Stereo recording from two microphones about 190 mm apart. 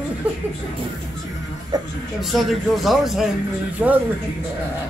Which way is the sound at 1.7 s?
20° right (ahead or behind).